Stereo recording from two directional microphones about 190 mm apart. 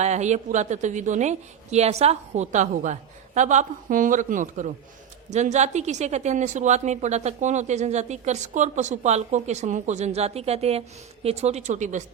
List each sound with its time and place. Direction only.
0.0 s a woman's voice: 35° right (ahead or behind)